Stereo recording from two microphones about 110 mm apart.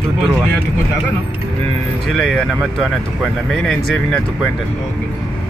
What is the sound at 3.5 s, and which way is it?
Speech, 5° left (ahead or behind).